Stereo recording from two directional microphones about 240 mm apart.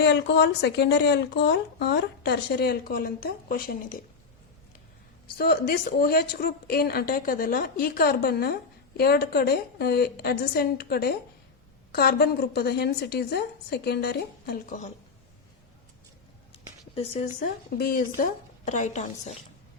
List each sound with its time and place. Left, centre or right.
0.0 s speech: left
5.4 s speech: left
16.5 s a sound: left
17.4 s speech: left